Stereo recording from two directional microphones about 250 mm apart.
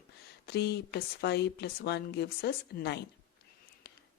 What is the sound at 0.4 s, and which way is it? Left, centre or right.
Speech, left.